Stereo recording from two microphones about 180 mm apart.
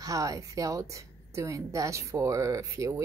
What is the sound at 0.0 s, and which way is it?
A woman's voice, 20° right (ahead or behind).